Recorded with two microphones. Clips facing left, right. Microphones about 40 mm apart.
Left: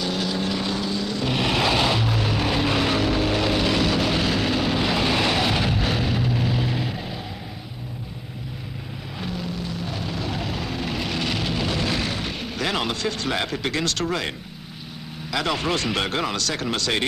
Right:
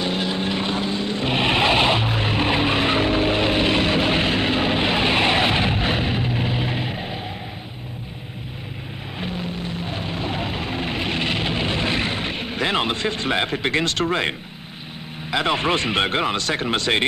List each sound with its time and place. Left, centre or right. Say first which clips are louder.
0.0 s vehicle: right 2 dB; right
9.2 s vehicle: right 2 dB; right
15.3 s speech: right 3 dB; right